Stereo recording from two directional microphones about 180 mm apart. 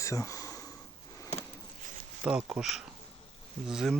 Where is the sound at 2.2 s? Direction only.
5° right (ahead or behind).